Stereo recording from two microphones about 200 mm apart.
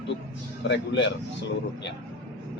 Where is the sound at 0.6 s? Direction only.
60° left (ahead or behind).